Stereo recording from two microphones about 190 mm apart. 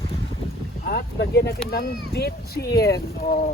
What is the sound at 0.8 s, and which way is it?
Speech, 55° left (ahead or behind).